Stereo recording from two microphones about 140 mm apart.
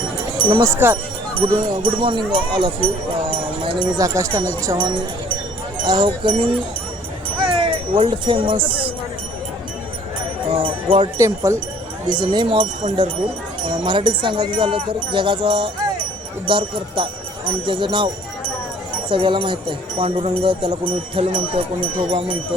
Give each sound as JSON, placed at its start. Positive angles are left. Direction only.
{"t": 0.3, "sound": "jingle bell", "side_deg": -35}
{"t": 0.8, "sound": "speech", "side_deg": -15}
{"t": 1.4, "sound": "speech", "side_deg": -40}
{"t": 5.8, "sound": "speech", "side_deg": -30}
{"t": 7.3, "sound": "jingle bell", "side_deg": -35}
{"t": 10.5, "sound": "speech", "side_deg": -40}
{"t": 11.2, "sound": "speech", "side_deg": -20}
{"t": 12.0, "sound": "speech", "side_deg": -30}
{"t": 13.7, "sound": "speech", "side_deg": -35}
{"t": 19.1, "sound": "speech", "side_deg": -40}